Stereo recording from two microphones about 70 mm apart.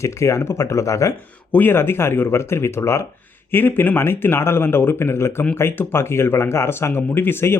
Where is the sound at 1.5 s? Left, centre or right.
Left.